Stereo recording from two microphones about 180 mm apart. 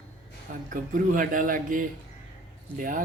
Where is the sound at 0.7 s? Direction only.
50° right (ahead or behind).